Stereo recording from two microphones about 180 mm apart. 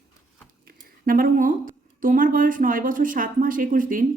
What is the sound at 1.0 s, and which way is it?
Speech, 50° right (ahead or behind).